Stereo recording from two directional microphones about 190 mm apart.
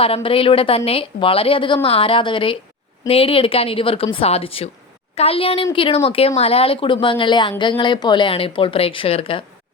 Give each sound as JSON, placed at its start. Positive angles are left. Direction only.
{"t": 0.0, "sound": "a woman's voice", "side_deg": 30}